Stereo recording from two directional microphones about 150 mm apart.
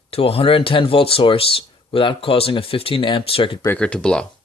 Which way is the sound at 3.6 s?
10° left (ahead or behind).